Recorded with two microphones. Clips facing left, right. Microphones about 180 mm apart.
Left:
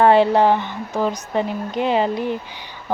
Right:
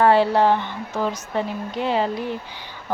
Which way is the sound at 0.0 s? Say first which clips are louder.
Left 3 dB; 20° left (ahead or behind).